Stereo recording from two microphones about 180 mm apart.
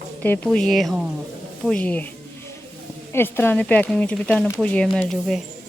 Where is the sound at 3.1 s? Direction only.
10° left (ahead or behind).